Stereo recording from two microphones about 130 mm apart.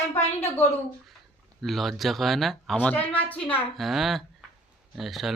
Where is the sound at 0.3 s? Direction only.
20° left (ahead or behind).